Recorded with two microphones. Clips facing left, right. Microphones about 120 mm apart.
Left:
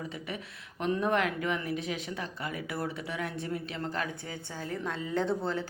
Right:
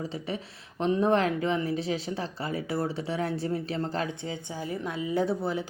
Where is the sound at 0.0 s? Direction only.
30° right (ahead or behind).